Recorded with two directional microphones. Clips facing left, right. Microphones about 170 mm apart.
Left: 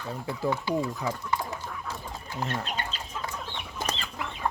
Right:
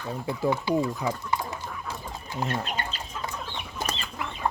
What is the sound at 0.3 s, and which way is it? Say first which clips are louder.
Speech: right 3 dB; 15° right (ahead or behind).